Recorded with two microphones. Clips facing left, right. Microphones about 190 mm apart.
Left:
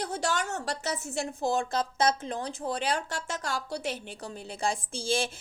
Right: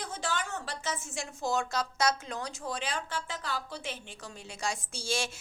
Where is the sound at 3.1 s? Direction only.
45° left (ahead or behind).